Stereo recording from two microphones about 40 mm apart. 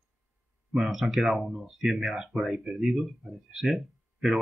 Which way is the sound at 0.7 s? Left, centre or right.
Centre.